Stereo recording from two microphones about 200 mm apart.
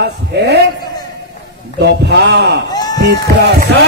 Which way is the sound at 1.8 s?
60° right (ahead or behind).